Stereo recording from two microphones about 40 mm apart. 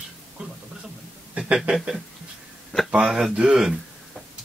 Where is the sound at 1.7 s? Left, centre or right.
Centre.